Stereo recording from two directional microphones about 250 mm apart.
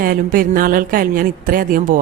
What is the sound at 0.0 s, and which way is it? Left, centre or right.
A woman's voice, right.